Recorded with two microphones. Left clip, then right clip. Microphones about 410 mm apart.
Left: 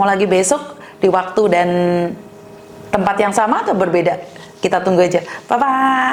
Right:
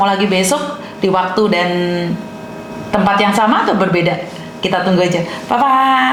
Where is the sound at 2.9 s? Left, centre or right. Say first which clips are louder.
Right 2 dB; left.